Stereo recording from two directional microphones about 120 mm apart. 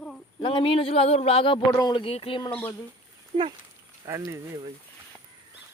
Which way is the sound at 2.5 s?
15° left (ahead or behind).